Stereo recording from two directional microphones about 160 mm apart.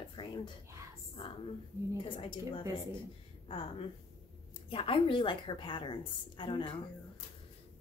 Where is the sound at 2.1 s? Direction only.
35° left (ahead or behind).